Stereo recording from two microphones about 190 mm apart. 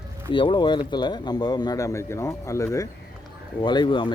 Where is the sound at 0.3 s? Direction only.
25° left (ahead or behind).